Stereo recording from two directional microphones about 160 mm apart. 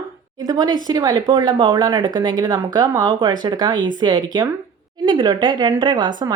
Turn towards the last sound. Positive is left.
turn(degrees=-30)  # may be behind; listen again after turning